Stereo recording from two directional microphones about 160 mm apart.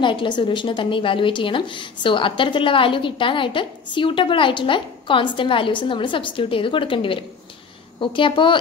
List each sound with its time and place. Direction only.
0.0 s a woman's voice: 30° left (ahead or behind)